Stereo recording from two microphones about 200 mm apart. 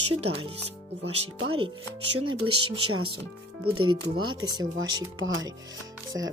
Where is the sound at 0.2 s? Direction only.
30° right (ahead or behind).